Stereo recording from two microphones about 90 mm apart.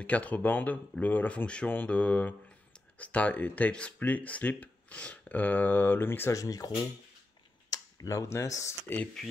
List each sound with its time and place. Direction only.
0.0 s speech: 15° left (ahead or behind)
6.3 s speech: 40° left (ahead or behind)
7.7 s speech: 40° left (ahead or behind)